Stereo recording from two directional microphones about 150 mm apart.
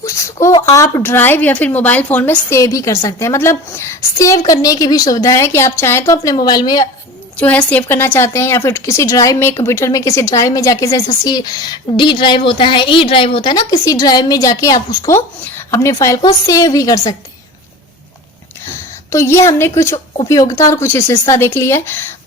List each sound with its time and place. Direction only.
0.0 s speech: 20° left (ahead or behind)
7.3 s speech: 10° left (ahead or behind)
19.1 s speech: 15° left (ahead or behind)